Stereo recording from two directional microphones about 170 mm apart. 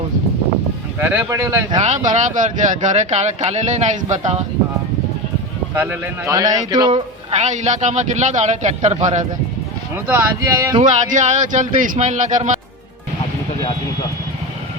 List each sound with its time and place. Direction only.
0.9 s speech: 15° right (ahead or behind)
1.8 s speech: 45° right (ahead or behind)
5.7 s a man's voice: 15° right (ahead or behind)
6.9 s speech: 40° right (ahead or behind)
9.9 s speech: 15° right (ahead or behind)
11.1 s speech: 45° right (ahead or behind)